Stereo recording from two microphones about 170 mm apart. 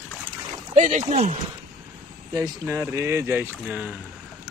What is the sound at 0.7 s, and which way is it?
Speech, 45° right (ahead or behind).